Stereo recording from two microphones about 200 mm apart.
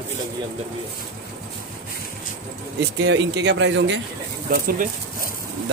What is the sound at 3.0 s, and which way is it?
Speech, 60° right (ahead or behind).